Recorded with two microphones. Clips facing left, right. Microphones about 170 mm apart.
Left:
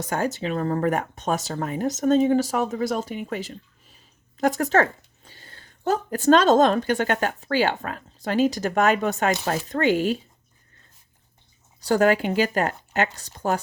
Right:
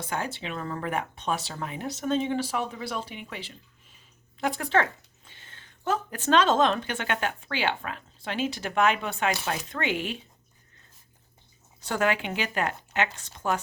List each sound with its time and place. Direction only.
0.0 s speech: 45° left (ahead or behind)
11.8 s speech: 40° left (ahead or behind)